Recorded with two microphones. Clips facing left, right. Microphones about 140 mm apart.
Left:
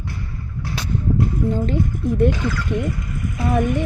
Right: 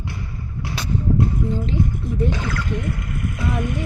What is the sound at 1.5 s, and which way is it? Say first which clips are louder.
Speech: left 2 dB; 50° left (ahead or behind).